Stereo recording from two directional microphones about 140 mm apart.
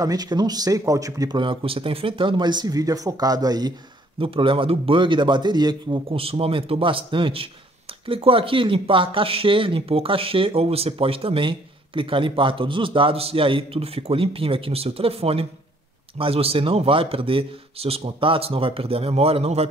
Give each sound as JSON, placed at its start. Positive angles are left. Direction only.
{"t": 0.0, "sound": "speech", "side_deg": -25}
{"t": 4.2, "sound": "speech", "side_deg": -40}